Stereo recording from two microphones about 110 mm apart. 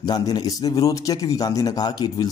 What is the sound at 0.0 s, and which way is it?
Speech, 35° left (ahead or behind).